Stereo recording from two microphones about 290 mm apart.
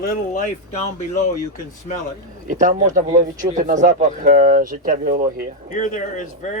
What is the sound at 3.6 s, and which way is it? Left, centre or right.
Speech, right.